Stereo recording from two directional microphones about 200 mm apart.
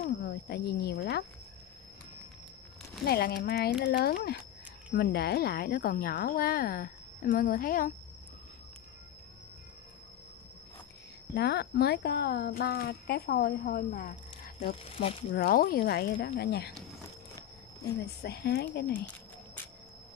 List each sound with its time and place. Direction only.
0.0 s a woman's voice: 50° left (ahead or behind)
3.1 s speech: 50° left (ahead or behind)
11.3 s speech: 55° left (ahead or behind)
17.8 s speech: 55° left (ahead or behind)